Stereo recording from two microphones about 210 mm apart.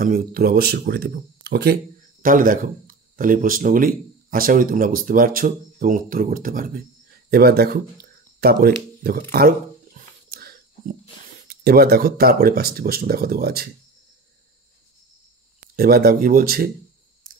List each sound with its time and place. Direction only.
0.0 s speech: 40° right (ahead or behind)
9.9 s a sound: 45° right (ahead or behind)
11.4 s speech: 45° right (ahead or behind)
15.6 s speech: 45° right (ahead or behind)